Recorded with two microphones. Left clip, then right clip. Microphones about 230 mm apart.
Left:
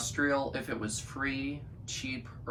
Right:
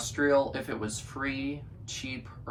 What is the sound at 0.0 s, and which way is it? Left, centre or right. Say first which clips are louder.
Speech: right 5 dB; centre.